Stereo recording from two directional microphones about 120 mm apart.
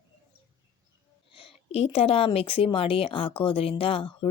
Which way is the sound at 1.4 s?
55° left (ahead or behind).